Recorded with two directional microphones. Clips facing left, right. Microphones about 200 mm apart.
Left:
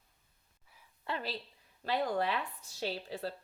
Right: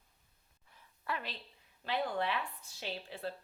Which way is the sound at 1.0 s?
30° left (ahead or behind).